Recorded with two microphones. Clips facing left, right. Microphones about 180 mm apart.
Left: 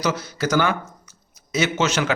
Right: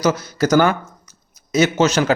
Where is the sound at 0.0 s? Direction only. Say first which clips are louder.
Right 6 dB; 40° right (ahead or behind).